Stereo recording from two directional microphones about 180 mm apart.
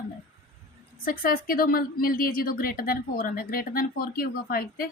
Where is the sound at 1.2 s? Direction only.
55° left (ahead or behind).